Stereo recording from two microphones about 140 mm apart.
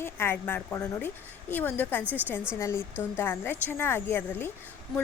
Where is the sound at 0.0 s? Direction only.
15° left (ahead or behind).